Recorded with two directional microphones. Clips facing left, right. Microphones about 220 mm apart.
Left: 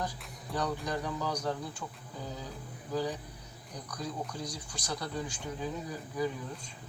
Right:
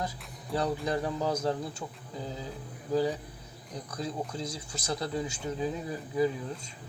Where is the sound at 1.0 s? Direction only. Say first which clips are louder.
Right 4 dB; 25° right (ahead or behind).